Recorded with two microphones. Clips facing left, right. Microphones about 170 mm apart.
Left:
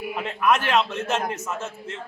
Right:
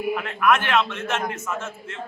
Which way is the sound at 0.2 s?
30° left (ahead or behind).